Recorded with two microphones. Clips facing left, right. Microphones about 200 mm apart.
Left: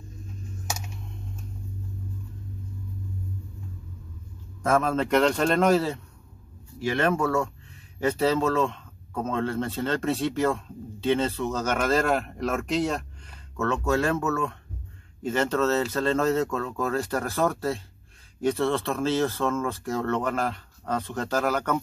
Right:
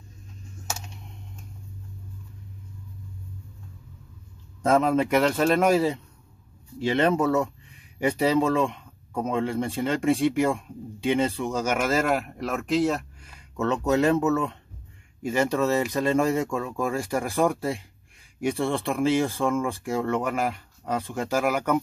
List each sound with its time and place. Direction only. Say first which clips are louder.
4.6 s speech: right 3 dB; 20° right (ahead or behind); by 13.3 s 5° right (ahead or behind)
13.6 s speech: right 2 dB; 20° right (ahead or behind)